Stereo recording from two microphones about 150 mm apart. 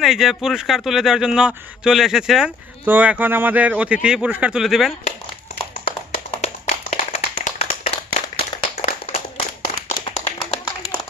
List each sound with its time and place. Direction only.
0.0 s speech: centre (ahead or behind)
5.9 s clapping: 45° left (ahead or behind)
9.0 s a sound: 40° left (ahead or behind)
10.0 s clapping: 45° left (ahead or behind)